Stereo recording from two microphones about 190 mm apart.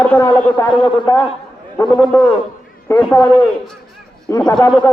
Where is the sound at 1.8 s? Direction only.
10° left (ahead or behind).